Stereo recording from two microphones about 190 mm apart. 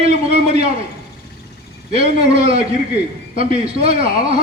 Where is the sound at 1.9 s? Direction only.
35° right (ahead or behind).